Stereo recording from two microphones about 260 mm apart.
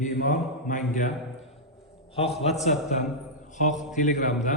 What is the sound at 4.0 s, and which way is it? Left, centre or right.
Speech, left.